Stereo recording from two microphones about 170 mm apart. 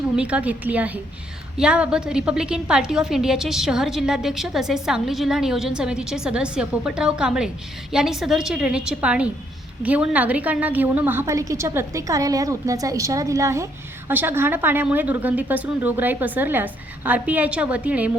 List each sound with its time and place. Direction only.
0.2 s a woman's voice: 5° right (ahead or behind)